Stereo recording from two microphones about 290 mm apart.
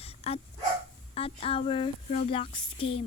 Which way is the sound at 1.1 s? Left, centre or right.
Centre.